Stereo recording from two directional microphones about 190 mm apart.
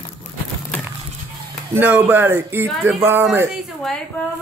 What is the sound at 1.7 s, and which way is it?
Speech, 10° right (ahead or behind).